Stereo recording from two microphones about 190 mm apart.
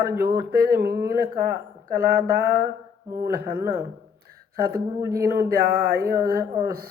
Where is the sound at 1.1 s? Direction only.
55° right (ahead or behind).